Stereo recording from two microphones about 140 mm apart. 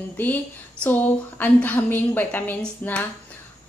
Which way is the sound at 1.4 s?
15° left (ahead or behind).